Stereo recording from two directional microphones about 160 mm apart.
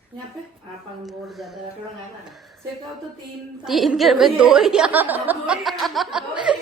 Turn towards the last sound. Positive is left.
turn(degrees=-5)  # may be behind; listen again after turning